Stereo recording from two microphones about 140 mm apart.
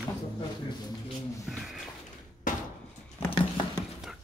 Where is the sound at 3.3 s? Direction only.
35° left (ahead or behind).